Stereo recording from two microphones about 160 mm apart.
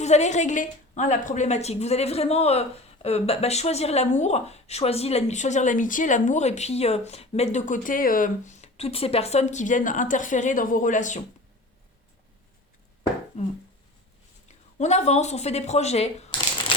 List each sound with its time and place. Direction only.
0.0 s a woman's voice: 45° left (ahead or behind)
13.3 s a sound: 40° left (ahead or behind)
14.4 s speech: 45° left (ahead or behind)